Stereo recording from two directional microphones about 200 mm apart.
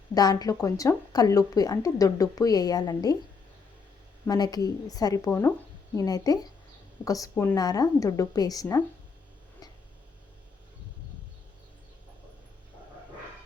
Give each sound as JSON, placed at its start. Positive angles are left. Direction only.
{"t": 0.1, "sound": "a woman's voice", "side_deg": 20}
{"t": 4.3, "sound": "a woman's voice", "side_deg": 20}